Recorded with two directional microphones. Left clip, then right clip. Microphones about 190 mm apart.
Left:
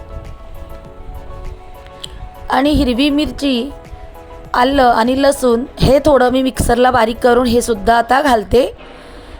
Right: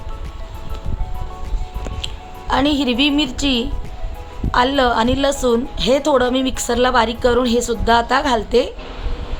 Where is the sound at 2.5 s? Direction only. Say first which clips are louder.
Left 3 dB; 30° left (ahead or behind).